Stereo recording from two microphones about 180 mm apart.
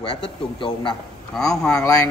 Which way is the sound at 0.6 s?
30° left (ahead or behind).